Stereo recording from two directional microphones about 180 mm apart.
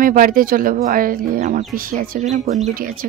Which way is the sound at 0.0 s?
50° right (ahead or behind).